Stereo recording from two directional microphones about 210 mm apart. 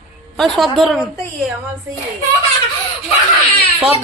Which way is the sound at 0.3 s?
Centre (ahead or behind).